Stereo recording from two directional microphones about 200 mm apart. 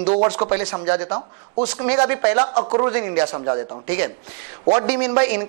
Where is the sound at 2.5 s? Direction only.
30° right (ahead or behind).